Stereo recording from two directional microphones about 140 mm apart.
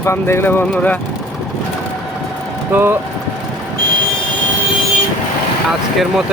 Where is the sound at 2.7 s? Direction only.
15° right (ahead or behind).